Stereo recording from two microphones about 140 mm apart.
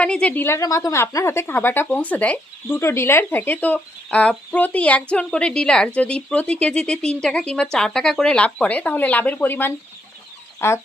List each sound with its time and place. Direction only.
0.0 s a woman's voice: 10° left (ahead or behind)